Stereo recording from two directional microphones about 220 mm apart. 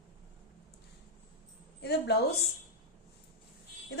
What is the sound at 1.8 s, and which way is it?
Speech, 50° left (ahead or behind).